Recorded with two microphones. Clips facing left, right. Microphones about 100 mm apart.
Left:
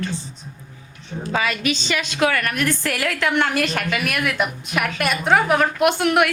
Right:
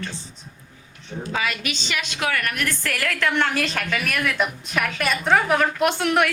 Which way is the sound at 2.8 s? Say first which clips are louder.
Left 2 dB; 15° left (ahead or behind).